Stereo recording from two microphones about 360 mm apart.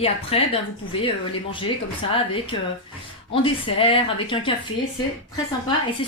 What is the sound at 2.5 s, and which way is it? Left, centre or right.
A woman's voice, centre.